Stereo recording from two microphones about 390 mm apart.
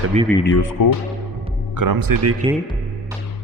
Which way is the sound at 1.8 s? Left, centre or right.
Right.